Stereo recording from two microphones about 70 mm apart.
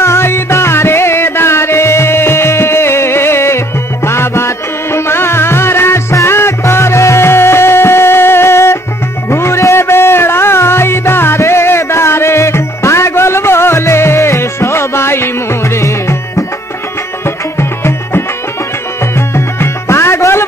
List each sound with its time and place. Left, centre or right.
0.0 s music: left